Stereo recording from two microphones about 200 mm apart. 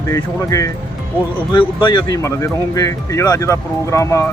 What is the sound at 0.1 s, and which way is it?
Speech, 15° left (ahead or behind).